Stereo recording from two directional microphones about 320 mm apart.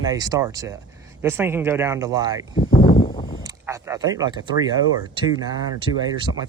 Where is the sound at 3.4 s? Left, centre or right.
Centre.